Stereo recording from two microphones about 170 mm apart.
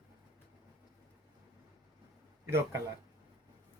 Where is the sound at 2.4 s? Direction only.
15° right (ahead or behind).